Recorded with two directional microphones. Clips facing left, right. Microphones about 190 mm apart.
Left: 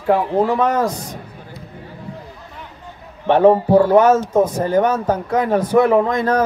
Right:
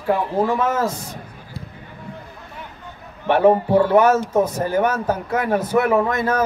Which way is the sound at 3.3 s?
25° left (ahead or behind).